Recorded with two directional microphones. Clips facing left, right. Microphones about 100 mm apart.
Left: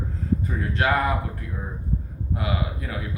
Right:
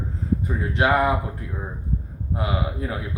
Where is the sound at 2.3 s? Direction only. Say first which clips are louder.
Right 2 dB; 25° right (ahead or behind).